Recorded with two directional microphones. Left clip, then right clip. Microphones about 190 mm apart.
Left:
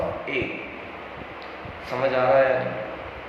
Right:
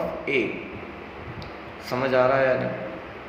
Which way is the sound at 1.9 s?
50° right (ahead or behind).